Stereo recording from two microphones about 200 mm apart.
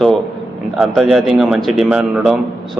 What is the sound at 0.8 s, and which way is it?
A man's voice, centre (ahead or behind).